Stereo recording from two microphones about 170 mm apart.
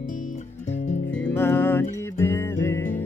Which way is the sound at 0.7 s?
45° left (ahead or behind).